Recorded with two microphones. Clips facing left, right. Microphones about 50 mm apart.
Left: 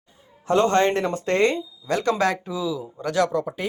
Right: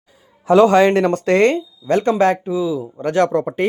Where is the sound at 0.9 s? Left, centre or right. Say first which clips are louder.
Right 7 dB; right.